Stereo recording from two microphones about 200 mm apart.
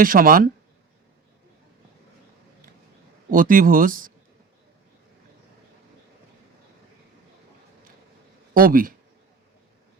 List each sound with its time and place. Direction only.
0.0 s speech: 45° right (ahead or behind)
3.2 s speech: 45° right (ahead or behind)
8.5 s speech: 45° right (ahead or behind)